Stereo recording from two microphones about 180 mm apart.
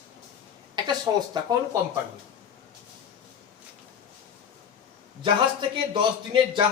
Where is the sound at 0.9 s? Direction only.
25° right (ahead or behind).